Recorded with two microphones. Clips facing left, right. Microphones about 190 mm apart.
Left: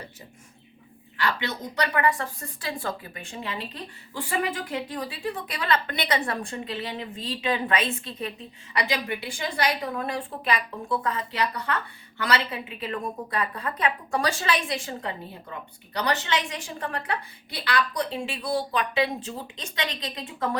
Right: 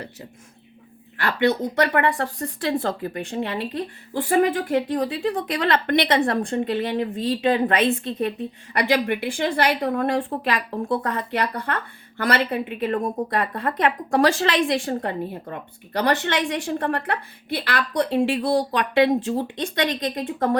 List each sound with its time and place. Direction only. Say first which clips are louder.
1.2 s speech: right 8 dB; 50° right (ahead or behind)
2.6 s a woman's voice: right 8 dB; 65° right (ahead or behind)
19.1 s speech: right 12 dB; 50° right (ahead or behind)